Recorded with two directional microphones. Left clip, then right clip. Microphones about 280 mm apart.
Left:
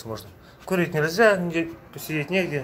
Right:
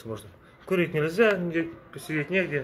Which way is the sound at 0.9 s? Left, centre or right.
Centre.